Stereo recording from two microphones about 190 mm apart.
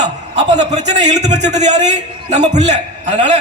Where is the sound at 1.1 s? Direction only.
35° right (ahead or behind).